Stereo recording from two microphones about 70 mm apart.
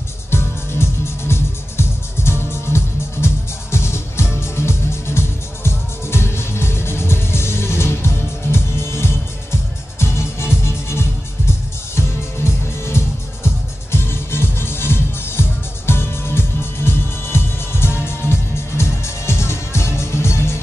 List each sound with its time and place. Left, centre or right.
0.3 s music: left